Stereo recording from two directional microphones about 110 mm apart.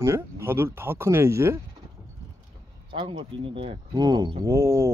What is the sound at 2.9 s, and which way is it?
Speech, 55° right (ahead or behind).